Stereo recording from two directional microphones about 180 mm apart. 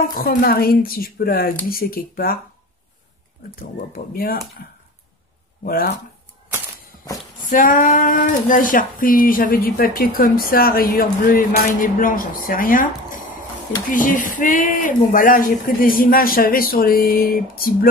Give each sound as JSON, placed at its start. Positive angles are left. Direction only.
{"t": 0.1, "sound": "a woman's voice", "side_deg": 50}
{"t": 3.5, "sound": "a woman's voice", "side_deg": 55}
{"t": 7.4, "sound": "speech", "side_deg": 50}